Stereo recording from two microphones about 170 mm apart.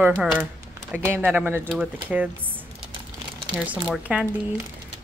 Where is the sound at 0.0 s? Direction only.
5° right (ahead or behind).